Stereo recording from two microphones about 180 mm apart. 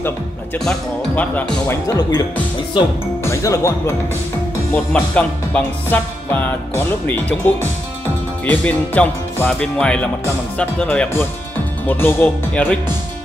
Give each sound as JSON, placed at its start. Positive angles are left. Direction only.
{"t": 0.7, "sound": "speech", "side_deg": 5}
{"t": 2.0, "sound": "speech", "side_deg": 20}
{"t": 4.9, "sound": "speech", "side_deg": 10}
{"t": 8.5, "sound": "speech", "side_deg": 10}